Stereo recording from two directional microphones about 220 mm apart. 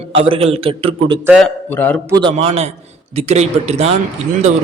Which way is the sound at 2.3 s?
30° right (ahead or behind).